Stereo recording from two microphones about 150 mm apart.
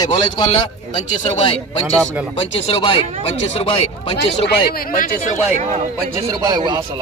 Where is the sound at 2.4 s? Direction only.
35° left (ahead or behind).